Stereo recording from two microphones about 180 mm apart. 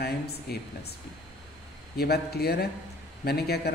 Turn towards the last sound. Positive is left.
turn(degrees=60)  # may be behind; listen again after turning